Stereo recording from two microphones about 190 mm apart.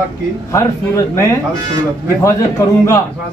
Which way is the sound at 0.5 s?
15° left (ahead or behind).